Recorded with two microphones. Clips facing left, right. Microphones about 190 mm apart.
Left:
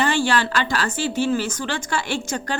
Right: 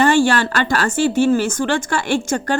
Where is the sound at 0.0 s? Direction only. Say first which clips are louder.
Right 6 dB; 45° right (ahead or behind).